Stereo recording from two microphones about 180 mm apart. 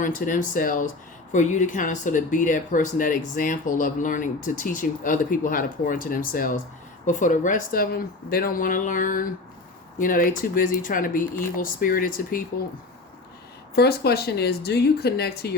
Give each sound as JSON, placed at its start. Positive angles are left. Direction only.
{"t": 0.0, "sound": "speech", "side_deg": 45}
{"t": 13.7, "sound": "speech", "side_deg": 60}